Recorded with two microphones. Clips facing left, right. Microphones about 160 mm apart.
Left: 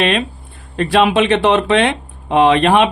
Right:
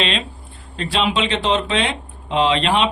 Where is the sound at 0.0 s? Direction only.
55° left (ahead or behind).